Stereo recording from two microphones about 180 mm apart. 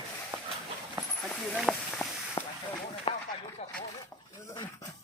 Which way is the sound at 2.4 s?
20° left (ahead or behind).